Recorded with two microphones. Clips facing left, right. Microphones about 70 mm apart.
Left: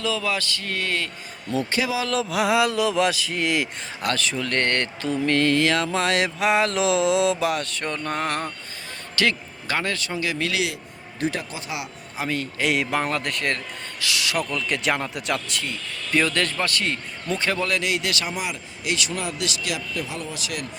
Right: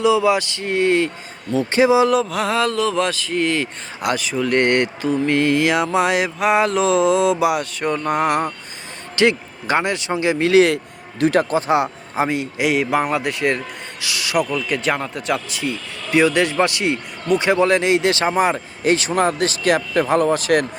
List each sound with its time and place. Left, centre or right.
0.0 s speech: centre
2.1 s speech: centre
4.0 s speech: centre; by 10.6 s right
11.2 s speech: right
11.5 s a man's voice: right
12.3 s speech: centre; by 20.7 s right